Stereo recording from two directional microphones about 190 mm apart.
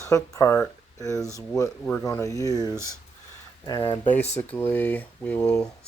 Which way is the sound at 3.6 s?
25° left (ahead or behind).